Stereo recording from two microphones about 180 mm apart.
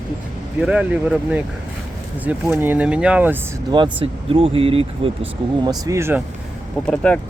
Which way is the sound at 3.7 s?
25° right (ahead or behind).